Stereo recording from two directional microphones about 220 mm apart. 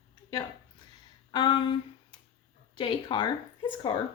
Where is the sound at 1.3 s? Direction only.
20° left (ahead or behind).